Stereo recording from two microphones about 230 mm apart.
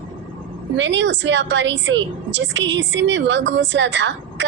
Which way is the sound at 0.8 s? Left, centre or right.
Right.